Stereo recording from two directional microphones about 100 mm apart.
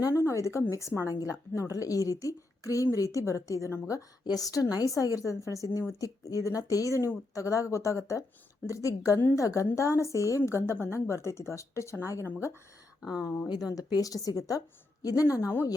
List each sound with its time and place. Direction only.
0.0 s a woman's voice: 30° left (ahead or behind)
13.0 s speech: 5° right (ahead or behind)
13.2 s speech: 20° left (ahead or behind)
13.5 s a woman's voice: 40° left (ahead or behind)